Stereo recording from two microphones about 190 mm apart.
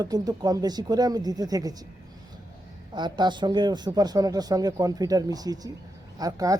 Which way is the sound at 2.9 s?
25° right (ahead or behind).